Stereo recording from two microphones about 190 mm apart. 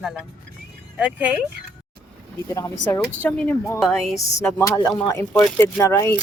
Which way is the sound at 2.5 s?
15° left (ahead or behind).